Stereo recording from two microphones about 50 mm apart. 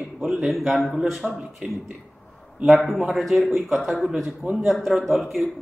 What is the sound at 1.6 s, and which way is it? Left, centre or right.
Speech, centre.